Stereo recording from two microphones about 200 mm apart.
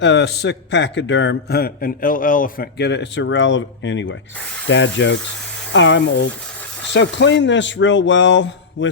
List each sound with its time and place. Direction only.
0.0 s a man's voice: 60° left (ahead or behind)